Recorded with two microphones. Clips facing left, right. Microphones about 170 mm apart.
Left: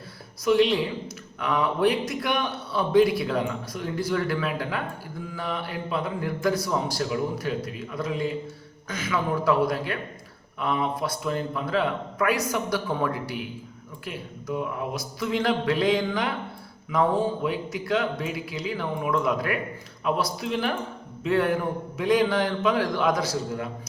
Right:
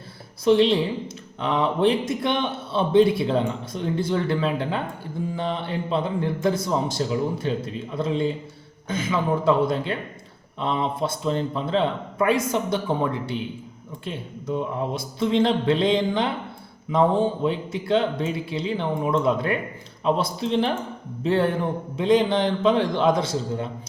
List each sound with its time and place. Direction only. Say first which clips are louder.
0.4 s a man's voice: right 3 dB; 30° right (ahead or behind)